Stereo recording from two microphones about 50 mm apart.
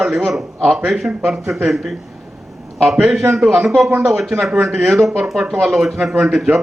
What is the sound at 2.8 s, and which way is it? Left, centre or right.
Speech, right.